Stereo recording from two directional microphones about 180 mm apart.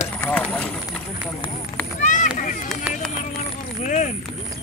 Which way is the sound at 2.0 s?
45° left (ahead or behind).